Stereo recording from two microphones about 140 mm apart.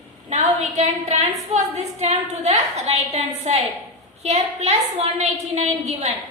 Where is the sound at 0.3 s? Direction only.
55° right (ahead or behind).